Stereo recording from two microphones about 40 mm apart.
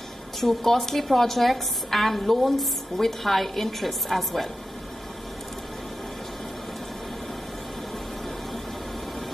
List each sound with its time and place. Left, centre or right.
0.4 s a woman's voice: centre